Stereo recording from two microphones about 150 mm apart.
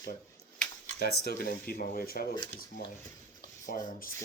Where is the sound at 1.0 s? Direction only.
90° left.